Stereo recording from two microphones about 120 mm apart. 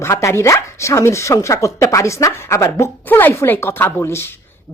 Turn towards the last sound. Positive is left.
turn(degrees=20)  # may be behind; listen again after turning